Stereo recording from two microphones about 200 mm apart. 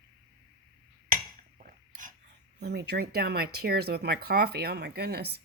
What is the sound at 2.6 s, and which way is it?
Speech, 55° right (ahead or behind).